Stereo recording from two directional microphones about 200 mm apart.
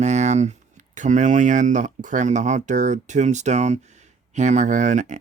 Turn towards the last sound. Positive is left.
turn(degrees=-40)  # may be behind; listen again after turning